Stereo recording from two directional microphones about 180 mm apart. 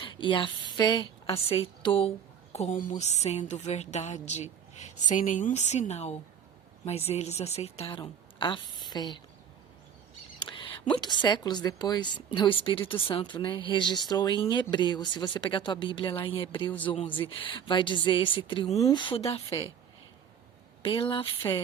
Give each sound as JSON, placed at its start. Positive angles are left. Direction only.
{"t": 0.0, "sound": "a woman's voice", "side_deg": 25}
{"t": 4.7, "sound": "a sound", "side_deg": 40}
{"t": 5.1, "sound": "a woman's voice", "side_deg": 45}
{"t": 10.4, "sound": "speech", "side_deg": 25}
{"t": 20.8, "sound": "speech", "side_deg": 30}